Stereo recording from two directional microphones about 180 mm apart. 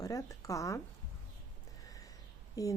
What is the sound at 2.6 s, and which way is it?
Speech, 20° left (ahead or behind).